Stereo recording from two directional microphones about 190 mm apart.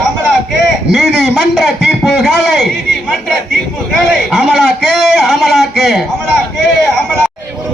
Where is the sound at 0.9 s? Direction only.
Centre (ahead or behind).